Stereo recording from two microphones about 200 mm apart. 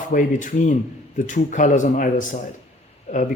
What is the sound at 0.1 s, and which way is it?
Speech, 40° left (ahead or behind).